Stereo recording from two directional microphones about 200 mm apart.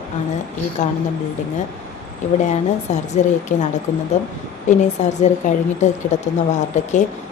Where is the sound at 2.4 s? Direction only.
35° left (ahead or behind).